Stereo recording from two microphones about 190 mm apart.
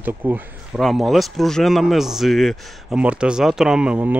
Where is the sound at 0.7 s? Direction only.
Centre (ahead or behind).